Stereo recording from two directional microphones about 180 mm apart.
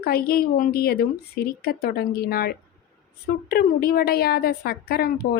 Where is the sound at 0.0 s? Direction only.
55° left (ahead or behind).